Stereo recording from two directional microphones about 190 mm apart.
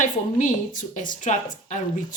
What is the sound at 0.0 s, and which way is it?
A woman's voice, 40° left (ahead or behind).